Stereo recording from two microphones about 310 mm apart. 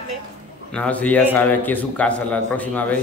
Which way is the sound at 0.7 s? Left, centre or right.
Centre.